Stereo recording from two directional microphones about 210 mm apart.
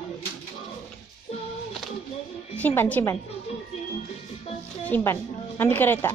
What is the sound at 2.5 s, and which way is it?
Speech, 10° left (ahead or behind).